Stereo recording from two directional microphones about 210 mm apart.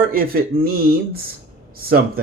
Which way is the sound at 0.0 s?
45° right (ahead or behind).